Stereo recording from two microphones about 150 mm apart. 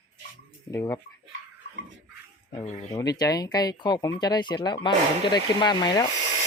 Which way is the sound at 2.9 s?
25° left (ahead or behind).